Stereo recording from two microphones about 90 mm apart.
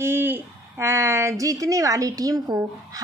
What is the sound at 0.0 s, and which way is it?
Speech, 25° right (ahead or behind).